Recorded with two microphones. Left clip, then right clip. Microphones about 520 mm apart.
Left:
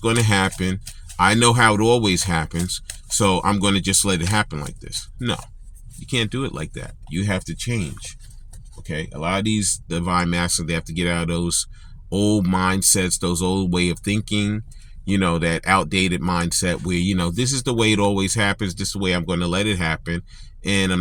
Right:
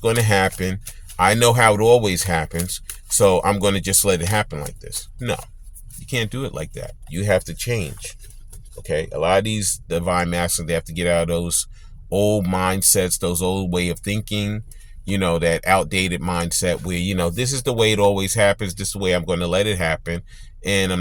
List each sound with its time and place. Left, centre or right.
0.1 s speech: right
6.1 s speech: right